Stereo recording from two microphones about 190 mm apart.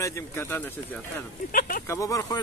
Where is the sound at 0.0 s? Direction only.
15° left (ahead or behind).